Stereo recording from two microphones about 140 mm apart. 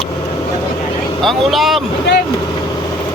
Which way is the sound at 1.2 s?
Centre (ahead or behind).